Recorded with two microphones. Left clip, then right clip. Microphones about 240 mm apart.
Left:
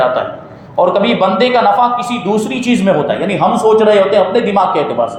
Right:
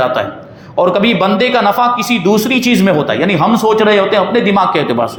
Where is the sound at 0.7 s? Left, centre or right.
Right.